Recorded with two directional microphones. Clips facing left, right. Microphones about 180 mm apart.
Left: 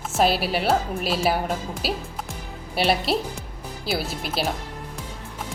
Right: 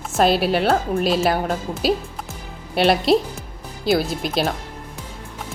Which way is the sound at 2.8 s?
5° left (ahead or behind).